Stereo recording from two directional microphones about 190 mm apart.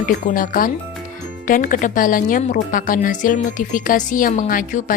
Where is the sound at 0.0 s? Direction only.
45° left (ahead or behind).